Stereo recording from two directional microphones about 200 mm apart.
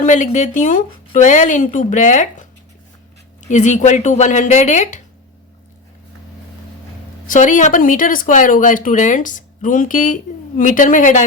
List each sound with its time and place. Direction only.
0.0 s speech: 40° left (ahead or behind)
3.5 s speech: 35° left (ahead or behind)
7.3 s speech: 40° left (ahead or behind)